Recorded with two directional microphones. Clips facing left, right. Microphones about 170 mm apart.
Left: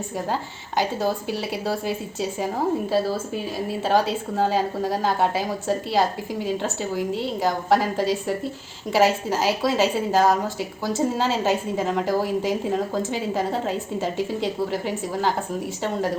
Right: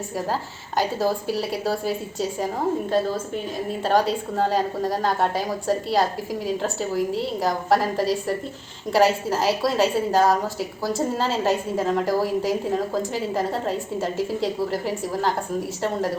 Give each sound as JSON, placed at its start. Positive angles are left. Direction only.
{"t": 0.8, "sound": "a woman's voice", "side_deg": 0}
{"t": 3.8, "sound": "a woman's voice", "side_deg": 0}